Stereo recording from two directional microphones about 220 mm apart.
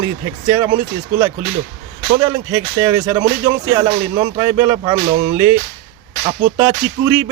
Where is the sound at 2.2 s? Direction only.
15° right (ahead or behind).